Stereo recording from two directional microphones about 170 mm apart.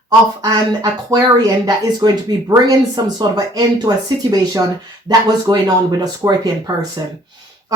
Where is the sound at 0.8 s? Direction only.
25° right (ahead or behind).